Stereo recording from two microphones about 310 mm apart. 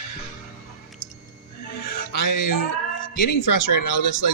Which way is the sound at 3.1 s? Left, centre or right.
Left.